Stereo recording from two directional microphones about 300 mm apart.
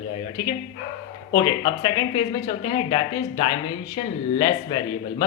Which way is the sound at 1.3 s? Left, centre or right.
Centre.